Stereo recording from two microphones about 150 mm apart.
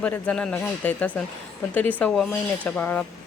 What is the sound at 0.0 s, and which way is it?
Speech, 10° left (ahead or behind).